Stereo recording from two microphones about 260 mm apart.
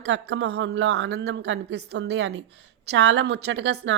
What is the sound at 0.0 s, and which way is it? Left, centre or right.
A woman's voice, right.